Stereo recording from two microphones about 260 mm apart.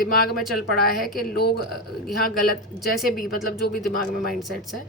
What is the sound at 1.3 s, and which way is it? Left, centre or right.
Speech, left.